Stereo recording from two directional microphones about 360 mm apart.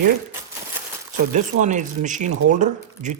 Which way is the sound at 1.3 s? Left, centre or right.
Right.